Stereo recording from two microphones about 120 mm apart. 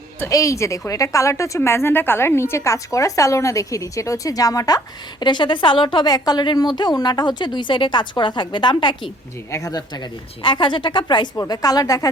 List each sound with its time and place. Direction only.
0.3 s a woman's voice: 25° left (ahead or behind)
9.5 s a woman's voice: 30° left (ahead or behind)